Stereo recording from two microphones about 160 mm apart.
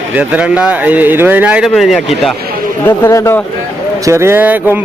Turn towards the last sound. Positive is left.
turn(degrees=-10)  # may be behind; listen again after turning